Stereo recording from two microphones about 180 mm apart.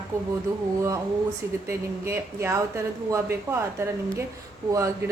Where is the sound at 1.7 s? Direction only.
15° right (ahead or behind).